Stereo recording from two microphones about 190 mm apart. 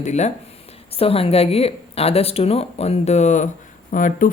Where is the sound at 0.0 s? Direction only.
35° left (ahead or behind).